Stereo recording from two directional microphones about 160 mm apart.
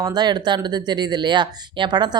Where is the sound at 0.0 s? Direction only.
25° right (ahead or behind).